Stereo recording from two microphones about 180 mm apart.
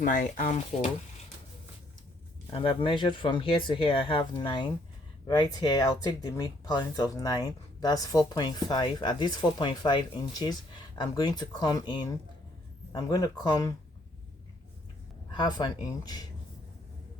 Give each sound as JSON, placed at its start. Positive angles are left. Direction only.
{"t": 0.0, "sound": "speech", "side_deg": 45}
{"t": 2.5, "sound": "speech", "side_deg": 30}
{"t": 15.3, "sound": "speech", "side_deg": 25}